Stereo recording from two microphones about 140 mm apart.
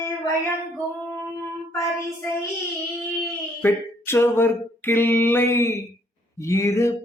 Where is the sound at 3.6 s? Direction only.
15° left (ahead or behind).